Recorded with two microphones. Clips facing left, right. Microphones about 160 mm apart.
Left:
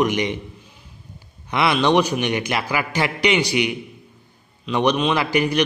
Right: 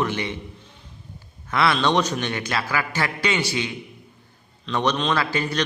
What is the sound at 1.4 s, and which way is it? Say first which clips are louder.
A man's voice: left 2 dB; 15° left (ahead or behind).